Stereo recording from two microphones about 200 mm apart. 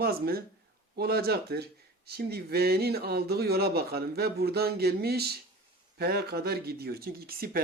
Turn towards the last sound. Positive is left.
turn(degrees=-50)  # may be behind; listen again after turning